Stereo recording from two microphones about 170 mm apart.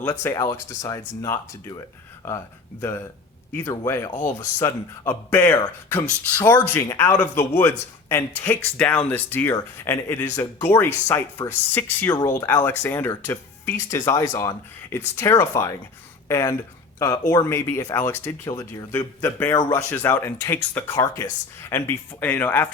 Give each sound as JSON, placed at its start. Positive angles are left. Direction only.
{"t": 0.0, "sound": "speech", "side_deg": 15}
{"t": 3.5, "sound": "speech", "side_deg": 15}